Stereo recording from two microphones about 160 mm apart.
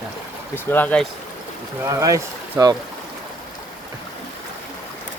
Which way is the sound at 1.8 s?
20° right (ahead or behind).